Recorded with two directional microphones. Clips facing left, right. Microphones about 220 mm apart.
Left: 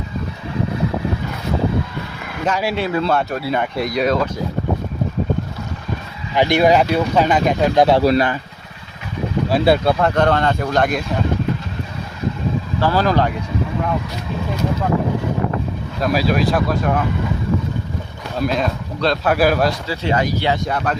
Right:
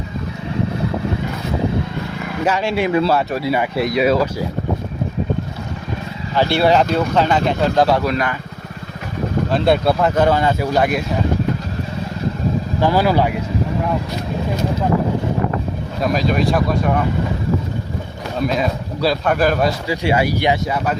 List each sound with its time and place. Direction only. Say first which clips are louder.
2.7 s speech: right 3 dB; 15° right (ahead or behind)
3.0 s speech: right 2 dB; 5° right (ahead or behind)
6.3 s speech: left 1 dB; 15° left (ahead or behind)
8.0 s speech: left 5 dB; 35° left (ahead or behind)
9.5 s speech: left 1 dB; 5° left (ahead or behind)
12.8 s speech: right 1 dB; 15° right (ahead or behind)
16.0 s speech: even; centre (ahead or behind)
18.3 s speech: even; centre (ahead or behind)
19.9 s speech: right 2 dB; 10° right (ahead or behind)